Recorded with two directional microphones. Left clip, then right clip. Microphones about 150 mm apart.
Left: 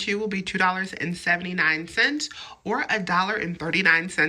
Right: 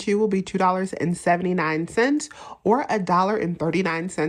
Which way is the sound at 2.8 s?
35° right (ahead or behind).